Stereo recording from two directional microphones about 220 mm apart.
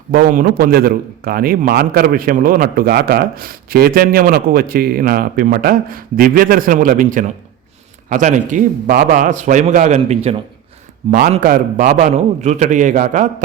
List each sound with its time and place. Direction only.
0.1 s a man's voice: 40° right (ahead or behind)